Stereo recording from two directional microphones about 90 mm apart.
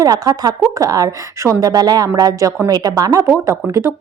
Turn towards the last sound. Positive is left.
turn(degrees=-30)  # may be behind; listen again after turning